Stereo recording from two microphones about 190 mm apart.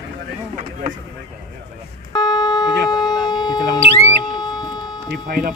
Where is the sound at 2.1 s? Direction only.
20° left (ahead or behind).